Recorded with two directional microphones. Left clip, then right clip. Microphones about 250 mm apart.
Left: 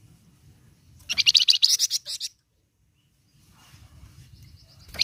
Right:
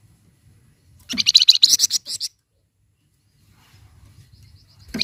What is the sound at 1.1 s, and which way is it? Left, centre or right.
Bird, centre.